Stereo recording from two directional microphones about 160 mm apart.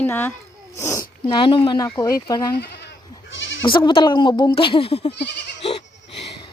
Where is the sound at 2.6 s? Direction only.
90° left.